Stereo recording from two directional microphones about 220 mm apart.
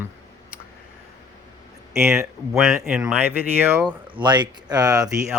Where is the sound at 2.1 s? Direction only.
Centre (ahead or behind).